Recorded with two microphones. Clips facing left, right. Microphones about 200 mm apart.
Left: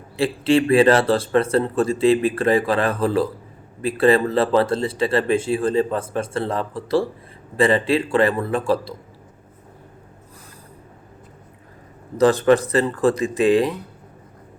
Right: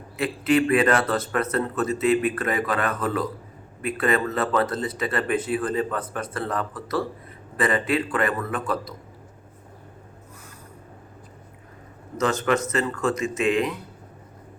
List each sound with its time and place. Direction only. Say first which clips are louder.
0.2 s speech: left 3 dB; 30° left (ahead or behind)
12.1 s speech: left 8 dB; 35° left (ahead or behind)